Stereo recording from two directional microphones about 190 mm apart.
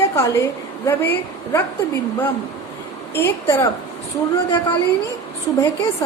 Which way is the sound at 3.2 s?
10° left (ahead or behind).